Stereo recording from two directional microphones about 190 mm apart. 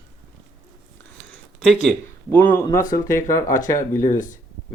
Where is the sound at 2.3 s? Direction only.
10° left (ahead or behind).